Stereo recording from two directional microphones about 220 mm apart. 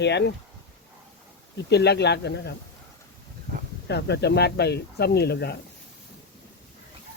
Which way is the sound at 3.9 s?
50° left (ahead or behind).